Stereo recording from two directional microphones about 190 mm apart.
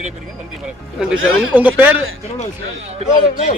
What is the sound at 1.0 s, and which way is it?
Speech, 5° right (ahead or behind).